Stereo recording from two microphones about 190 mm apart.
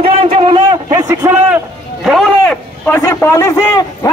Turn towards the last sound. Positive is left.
turn(degrees=15)  # may be behind; listen again after turning